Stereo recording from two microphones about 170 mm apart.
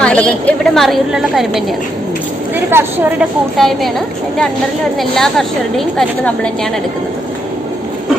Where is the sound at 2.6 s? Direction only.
10° right (ahead or behind).